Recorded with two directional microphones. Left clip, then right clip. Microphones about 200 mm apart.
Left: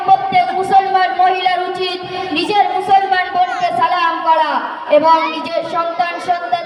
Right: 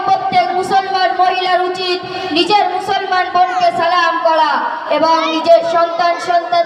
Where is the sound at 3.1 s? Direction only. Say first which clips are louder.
Right 2 dB; 45° right (ahead or behind).